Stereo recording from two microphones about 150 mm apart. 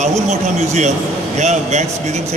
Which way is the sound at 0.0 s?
50° right (ahead or behind).